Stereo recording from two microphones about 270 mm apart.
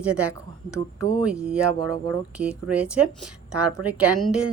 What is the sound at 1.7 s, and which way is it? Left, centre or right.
Speech, right.